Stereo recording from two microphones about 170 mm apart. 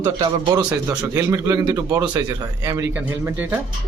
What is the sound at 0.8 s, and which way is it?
Speech, 15° right (ahead or behind).